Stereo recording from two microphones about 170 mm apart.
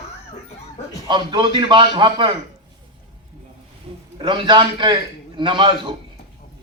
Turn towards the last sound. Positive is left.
turn(degrees=-30)  # may be behind; listen again after turning